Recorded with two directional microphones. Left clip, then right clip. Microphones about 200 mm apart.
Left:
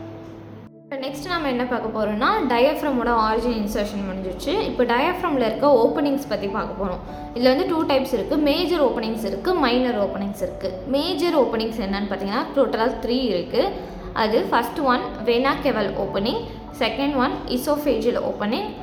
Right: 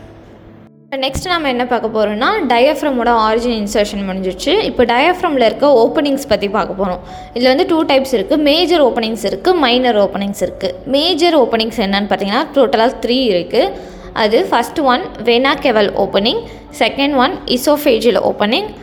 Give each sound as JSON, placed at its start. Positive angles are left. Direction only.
{"t": 0.9, "sound": "a woman's voice", "side_deg": -40}